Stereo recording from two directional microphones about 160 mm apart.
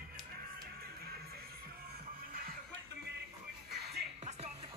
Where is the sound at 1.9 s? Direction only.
70° right (ahead or behind).